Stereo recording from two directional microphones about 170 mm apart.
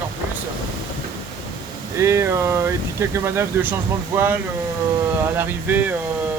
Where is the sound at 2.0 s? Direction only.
15° right (ahead or behind).